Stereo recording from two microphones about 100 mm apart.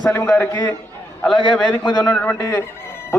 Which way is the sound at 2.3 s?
30° left (ahead or behind).